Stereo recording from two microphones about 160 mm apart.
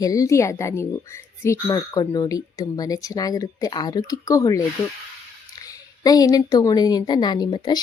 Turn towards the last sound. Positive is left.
turn(degrees=25)  # may be behind; listen again after turning